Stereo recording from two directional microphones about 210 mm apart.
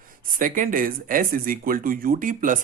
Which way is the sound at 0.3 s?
40° right (ahead or behind).